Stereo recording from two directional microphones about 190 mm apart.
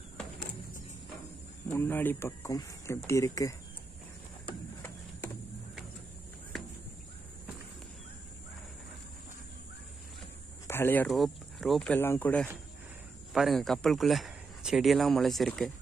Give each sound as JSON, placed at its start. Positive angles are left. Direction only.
{"t": 1.7, "sound": "speech", "side_deg": 10}
{"t": 10.7, "sound": "speech", "side_deg": 10}
{"t": 11.1, "sound": "speech", "side_deg": 0}